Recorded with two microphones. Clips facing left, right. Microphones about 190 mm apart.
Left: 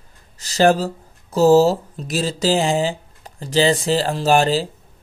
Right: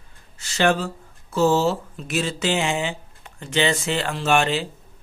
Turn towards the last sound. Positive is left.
turn(degrees=35)  # may be behind; listen again after turning